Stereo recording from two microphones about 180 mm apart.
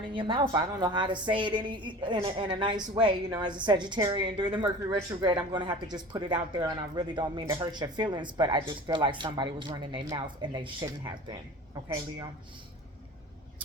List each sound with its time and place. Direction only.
0.1 s speech: 25° right (ahead or behind)